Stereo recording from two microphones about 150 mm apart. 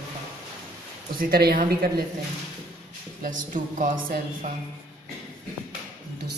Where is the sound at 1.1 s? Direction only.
80° right.